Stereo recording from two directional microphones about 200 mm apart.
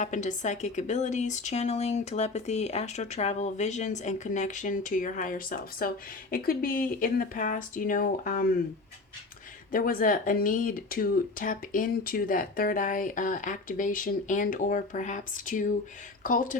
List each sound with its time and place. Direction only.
0.0 s speech: 40° left (ahead or behind)
9.7 s speech: 45° left (ahead or behind)